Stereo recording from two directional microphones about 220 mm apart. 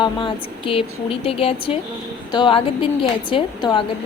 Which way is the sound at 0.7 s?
25° left (ahead or behind).